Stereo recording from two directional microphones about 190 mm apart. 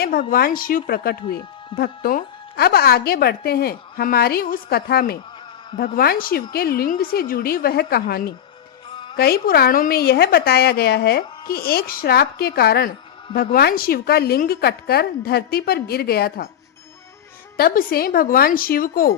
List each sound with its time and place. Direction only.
0.0 s a woman's voice: 50° left (ahead or behind)
17.6 s a woman's voice: 50° left (ahead or behind)